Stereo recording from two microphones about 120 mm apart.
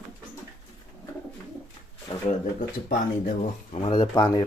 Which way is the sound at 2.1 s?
45° left (ahead or behind).